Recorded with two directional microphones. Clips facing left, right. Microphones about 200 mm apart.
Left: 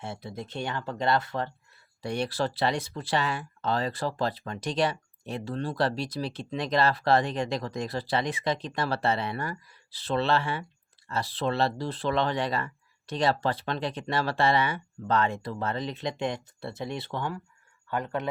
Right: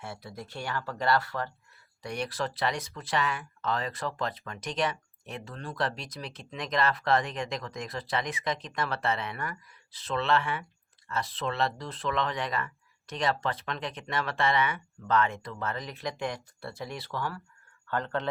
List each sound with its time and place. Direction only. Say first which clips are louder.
0.0 s a man's voice: left 4 dB; 25° left (ahead or behind)